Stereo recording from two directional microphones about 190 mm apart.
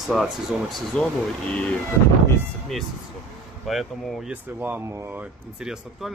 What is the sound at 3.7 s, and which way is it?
Speech, centre (ahead or behind).